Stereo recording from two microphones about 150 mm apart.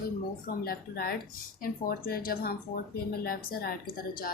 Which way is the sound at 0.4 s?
80° left.